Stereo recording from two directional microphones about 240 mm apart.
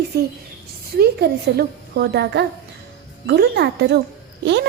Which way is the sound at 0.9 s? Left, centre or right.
Right.